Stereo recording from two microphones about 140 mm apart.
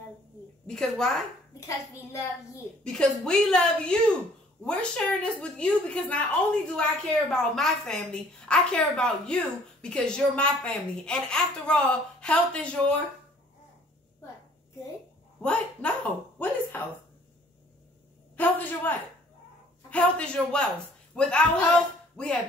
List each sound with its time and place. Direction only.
0.7 s a woman's voice: 5° left (ahead or behind)
1.7 s a woman's voice: 25° left (ahead or behind)
2.8 s a woman's voice: 5° left (ahead or behind)
15.4 s a woman's voice: 10° left (ahead or behind)
18.3 s a woman's voice: 10° left (ahead or behind)